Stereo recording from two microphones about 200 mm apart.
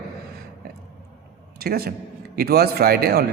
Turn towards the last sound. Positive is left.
turn(degrees=-50)  # may be behind; listen again after turning